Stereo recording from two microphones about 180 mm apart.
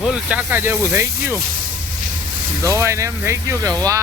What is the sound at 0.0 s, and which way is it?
Speech, 5° right (ahead or behind).